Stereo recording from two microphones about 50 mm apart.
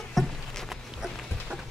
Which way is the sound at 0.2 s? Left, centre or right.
Centre.